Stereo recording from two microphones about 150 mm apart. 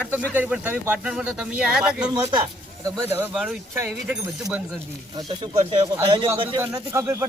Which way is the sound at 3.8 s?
15° right (ahead or behind).